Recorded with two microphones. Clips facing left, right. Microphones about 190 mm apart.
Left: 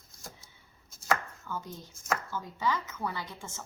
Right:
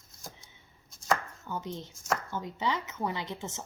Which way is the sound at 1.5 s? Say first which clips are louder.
Right 4 dB; 20° right (ahead or behind).